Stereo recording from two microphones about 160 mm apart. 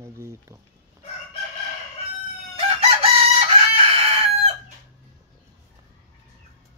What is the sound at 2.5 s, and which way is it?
Chicken, 40° right (ahead or behind).